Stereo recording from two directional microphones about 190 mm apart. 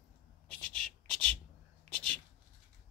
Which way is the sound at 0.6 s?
5° left (ahead or behind).